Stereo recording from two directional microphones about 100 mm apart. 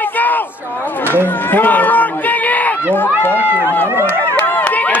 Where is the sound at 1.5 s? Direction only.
15° left (ahead or behind).